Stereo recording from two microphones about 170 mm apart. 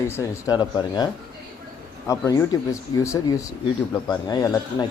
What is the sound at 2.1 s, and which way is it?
Speech, 20° left (ahead or behind).